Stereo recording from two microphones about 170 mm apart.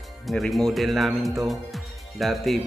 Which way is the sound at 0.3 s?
Centre (ahead or behind).